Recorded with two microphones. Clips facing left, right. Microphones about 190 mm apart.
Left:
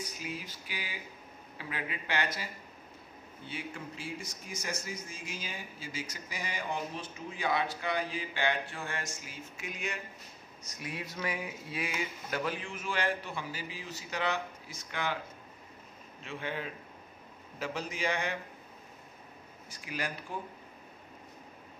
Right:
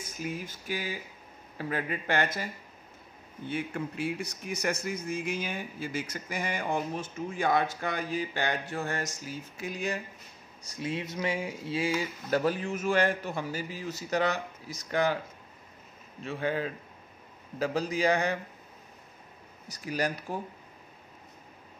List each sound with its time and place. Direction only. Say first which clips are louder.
0.0 s a sound: right 4 dB; 50° right (ahead or behind)
1.6 s speech: right 7 dB; 45° right (ahead or behind)
16.3 s speech: right 7 dB; 40° right (ahead or behind)
19.7 s speech: right 7 dB; 40° right (ahead or behind)